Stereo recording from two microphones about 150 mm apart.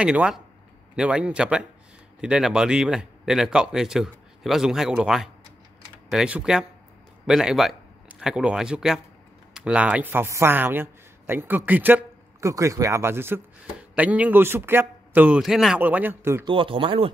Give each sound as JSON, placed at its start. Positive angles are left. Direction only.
{"t": 0.0, "sound": "speech", "side_deg": -5}
{"t": 16.4, "sound": "speech", "side_deg": -35}